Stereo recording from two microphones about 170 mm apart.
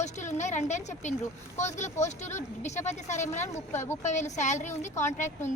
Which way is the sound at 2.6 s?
40° left (ahead or behind).